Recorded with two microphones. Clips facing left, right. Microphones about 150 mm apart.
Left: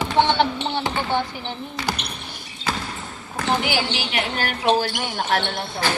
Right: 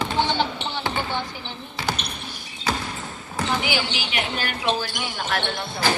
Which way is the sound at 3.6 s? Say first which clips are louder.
Left 2 dB; 60° left (ahead or behind).